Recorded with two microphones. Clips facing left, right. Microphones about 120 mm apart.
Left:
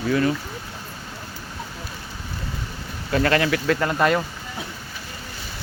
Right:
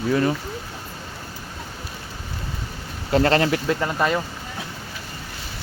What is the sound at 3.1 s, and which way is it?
Speech, 30° right (ahead or behind).